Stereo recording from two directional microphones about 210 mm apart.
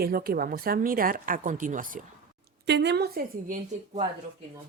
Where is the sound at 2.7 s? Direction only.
55° right (ahead or behind).